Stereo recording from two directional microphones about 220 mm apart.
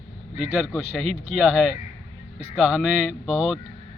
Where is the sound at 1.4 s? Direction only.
5° right (ahead or behind).